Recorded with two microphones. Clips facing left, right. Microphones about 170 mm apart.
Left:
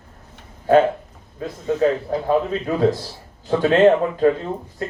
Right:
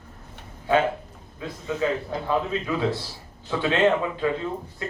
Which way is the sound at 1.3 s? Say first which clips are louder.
Left 7 dB; 45° left (ahead or behind).